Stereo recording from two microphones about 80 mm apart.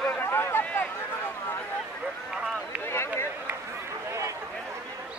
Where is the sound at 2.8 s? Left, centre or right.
Left.